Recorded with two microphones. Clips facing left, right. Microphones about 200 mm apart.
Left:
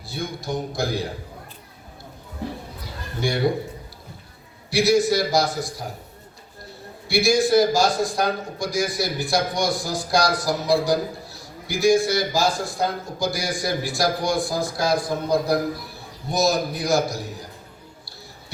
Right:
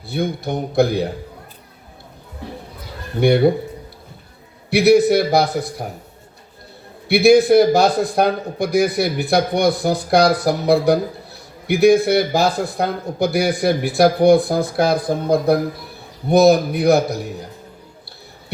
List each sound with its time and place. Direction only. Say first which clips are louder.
0.1 s a man's voice: right 6 dB; 60° right (ahead or behind)
3.2 s a man's voice: right 9 dB; 60° right (ahead or behind)
4.7 s a man's voice: right 6 dB; 60° right (ahead or behind)
7.1 s a man's voice: right 7 dB; 60° right (ahead or behind)